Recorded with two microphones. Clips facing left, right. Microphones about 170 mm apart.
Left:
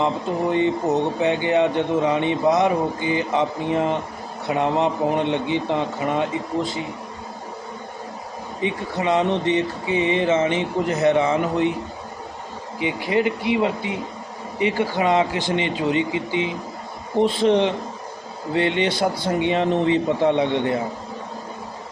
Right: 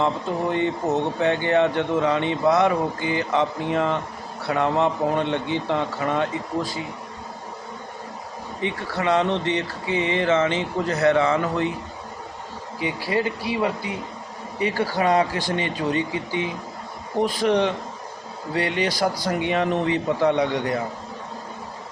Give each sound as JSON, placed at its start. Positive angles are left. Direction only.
{"t": 0.5, "sound": "speech", "side_deg": 15}
{"t": 8.6, "sound": "speech", "side_deg": 20}
{"t": 12.8, "sound": "speech", "side_deg": 20}